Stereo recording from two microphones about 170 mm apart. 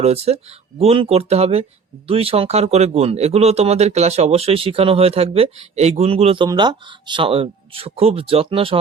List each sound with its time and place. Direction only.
0.0 s speech: 35° right (ahead or behind)